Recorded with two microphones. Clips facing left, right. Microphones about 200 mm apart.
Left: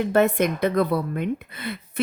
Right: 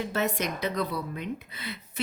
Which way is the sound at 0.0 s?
55° left (ahead or behind).